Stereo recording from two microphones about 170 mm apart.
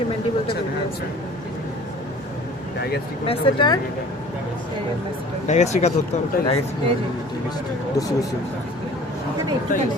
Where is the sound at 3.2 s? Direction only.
30° left (ahead or behind).